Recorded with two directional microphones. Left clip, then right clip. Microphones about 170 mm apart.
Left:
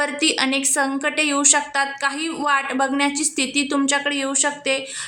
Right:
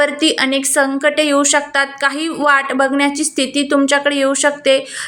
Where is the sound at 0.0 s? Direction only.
15° right (ahead or behind).